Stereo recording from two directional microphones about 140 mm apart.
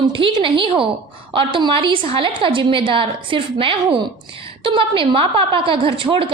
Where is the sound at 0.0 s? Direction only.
35° right (ahead or behind).